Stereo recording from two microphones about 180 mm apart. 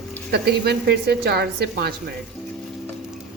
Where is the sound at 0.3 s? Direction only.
65° right (ahead or behind).